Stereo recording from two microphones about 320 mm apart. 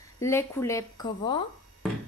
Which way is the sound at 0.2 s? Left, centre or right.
Centre.